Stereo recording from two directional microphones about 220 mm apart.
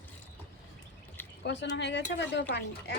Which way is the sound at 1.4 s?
50° left (ahead or behind).